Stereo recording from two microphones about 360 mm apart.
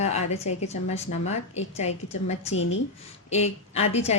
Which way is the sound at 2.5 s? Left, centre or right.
Left.